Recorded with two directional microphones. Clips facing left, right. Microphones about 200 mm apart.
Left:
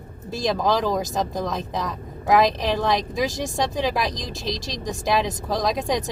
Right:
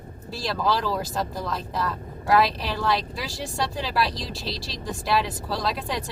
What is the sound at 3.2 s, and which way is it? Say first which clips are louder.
Speech: left 6 dB; 15° left (ahead or behind).